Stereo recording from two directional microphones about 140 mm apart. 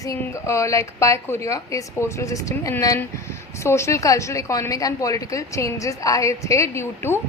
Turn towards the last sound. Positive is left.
turn(degrees=20)  # may be behind; listen again after turning